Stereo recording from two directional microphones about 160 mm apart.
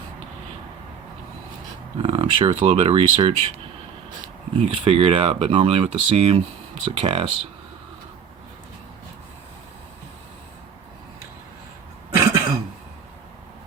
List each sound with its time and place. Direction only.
2.0 s speech: 35° right (ahead or behind)
4.5 s speech: 40° right (ahead or behind)
12.1 s cough: 20° right (ahead or behind)